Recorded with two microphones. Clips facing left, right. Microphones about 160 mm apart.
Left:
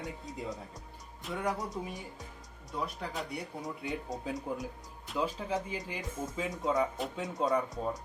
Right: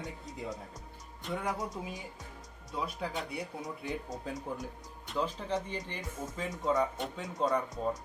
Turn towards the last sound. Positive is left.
turn(degrees=0)  # may be behind; listen again after turning